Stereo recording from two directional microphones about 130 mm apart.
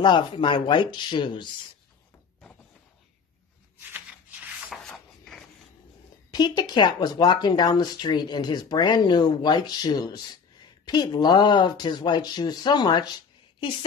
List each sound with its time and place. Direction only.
0.0 s speech: 35° left (ahead or behind)
3.9 s rub: 10° right (ahead or behind)
4.8 s a sound: 5° left (ahead or behind)
6.3 s speech: 35° left (ahead or behind)